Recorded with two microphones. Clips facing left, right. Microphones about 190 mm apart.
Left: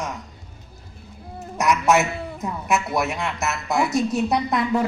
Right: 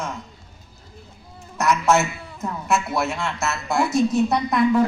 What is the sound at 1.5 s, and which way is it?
A man's voice, 15° left (ahead or behind).